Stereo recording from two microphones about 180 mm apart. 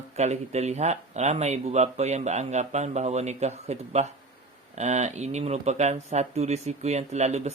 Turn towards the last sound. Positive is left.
turn(degrees=-40)  # may be behind; listen again after turning